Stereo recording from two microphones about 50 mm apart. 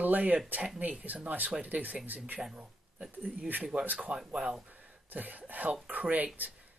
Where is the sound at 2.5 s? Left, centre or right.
Centre.